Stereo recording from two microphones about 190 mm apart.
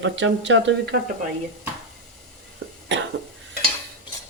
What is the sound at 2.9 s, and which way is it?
Cough, 70° right (ahead or behind).